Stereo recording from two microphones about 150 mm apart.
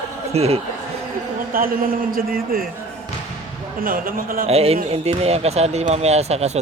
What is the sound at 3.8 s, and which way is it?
Speech, 70° right (ahead or behind).